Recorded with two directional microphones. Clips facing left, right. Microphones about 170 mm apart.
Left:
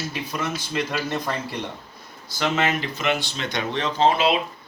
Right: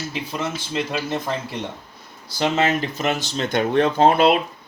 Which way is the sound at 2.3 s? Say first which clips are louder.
Right 3 dB; 30° right (ahead or behind).